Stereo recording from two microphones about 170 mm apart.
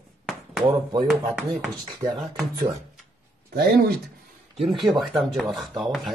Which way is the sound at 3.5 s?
70° right (ahead or behind).